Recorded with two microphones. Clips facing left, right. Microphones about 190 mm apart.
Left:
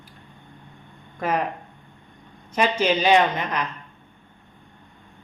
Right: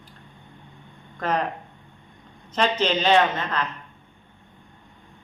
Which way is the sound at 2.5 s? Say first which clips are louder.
Left 1 dB; 10° left (ahead or behind).